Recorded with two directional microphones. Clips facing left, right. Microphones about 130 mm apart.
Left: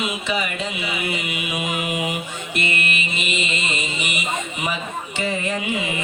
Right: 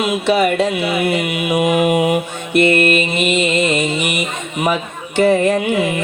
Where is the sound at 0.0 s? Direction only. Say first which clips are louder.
Right 10 dB; 70° right (ahead or behind).